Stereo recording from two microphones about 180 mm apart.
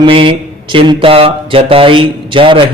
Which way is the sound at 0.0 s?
30° right (ahead or behind).